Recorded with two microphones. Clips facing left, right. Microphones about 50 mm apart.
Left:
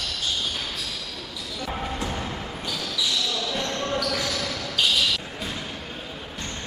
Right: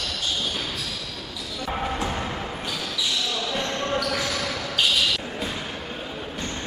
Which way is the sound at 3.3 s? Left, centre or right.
Centre.